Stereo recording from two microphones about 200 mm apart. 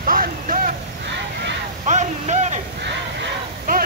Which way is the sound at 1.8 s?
35° right (ahead or behind).